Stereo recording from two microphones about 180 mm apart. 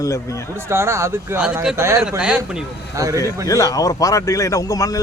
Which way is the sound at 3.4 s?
20° left (ahead or behind).